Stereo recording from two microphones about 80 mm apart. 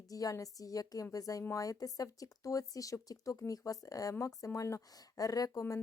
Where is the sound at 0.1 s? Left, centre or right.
Left.